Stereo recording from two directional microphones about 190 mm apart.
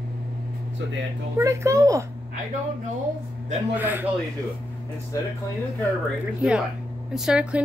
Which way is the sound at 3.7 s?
10° right (ahead or behind).